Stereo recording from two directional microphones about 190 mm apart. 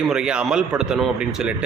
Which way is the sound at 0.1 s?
5° right (ahead or behind).